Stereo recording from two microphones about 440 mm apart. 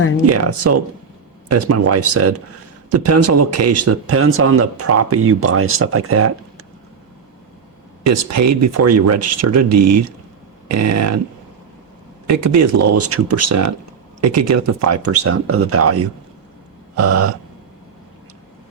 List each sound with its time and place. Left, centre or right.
0.3 s speech: right
8.0 s speech: right
12.3 s speech: right